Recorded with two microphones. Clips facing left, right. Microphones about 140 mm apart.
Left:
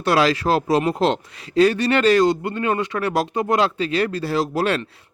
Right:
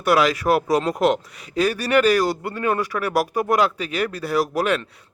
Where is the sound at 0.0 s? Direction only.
25° left (ahead or behind).